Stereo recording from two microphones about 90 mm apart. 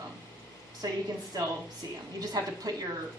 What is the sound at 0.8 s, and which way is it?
Speech, 45° right (ahead or behind).